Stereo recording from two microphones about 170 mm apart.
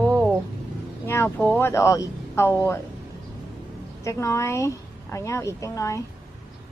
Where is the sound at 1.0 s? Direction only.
15° left (ahead or behind).